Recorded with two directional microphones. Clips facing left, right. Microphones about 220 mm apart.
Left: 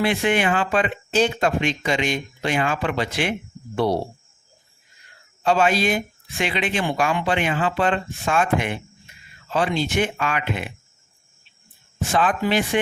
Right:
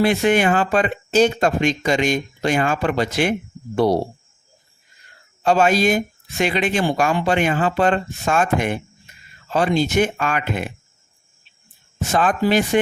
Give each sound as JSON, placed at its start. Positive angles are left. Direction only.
{"t": 0.0, "sound": "speech", "side_deg": -40}
{"t": 5.4, "sound": "speech", "side_deg": -45}
{"t": 12.0, "sound": "speech", "side_deg": -45}